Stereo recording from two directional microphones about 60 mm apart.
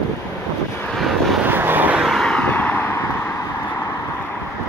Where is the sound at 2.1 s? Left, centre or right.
Centre.